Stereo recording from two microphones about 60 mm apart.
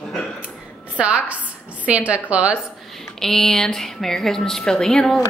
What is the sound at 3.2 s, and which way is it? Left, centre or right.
A woman's voice, centre.